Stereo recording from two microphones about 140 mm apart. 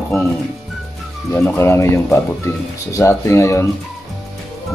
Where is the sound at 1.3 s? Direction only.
15° left (ahead or behind).